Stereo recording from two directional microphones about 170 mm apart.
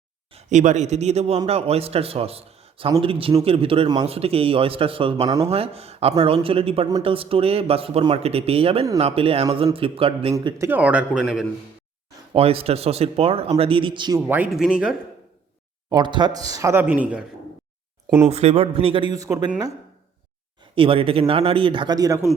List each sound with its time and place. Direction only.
0.3 s speech: 45° right (ahead or behind)
10.3 s a man's voice: 20° right (ahead or behind)
12.3 s speech: 35° right (ahead or behind)
14.3 s speech: 10° right (ahead or behind)
15.9 s a man's voice: 25° right (ahead or behind); by 17.2 s 10° right (ahead or behind)
18.3 s speech: 40° right (ahead or behind)
19.1 s speech: 20° right (ahead or behind)
20.7 s speech: 30° right (ahead or behind)